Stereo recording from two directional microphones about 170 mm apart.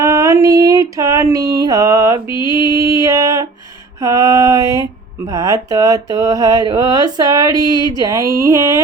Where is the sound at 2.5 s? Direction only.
20° right (ahead or behind).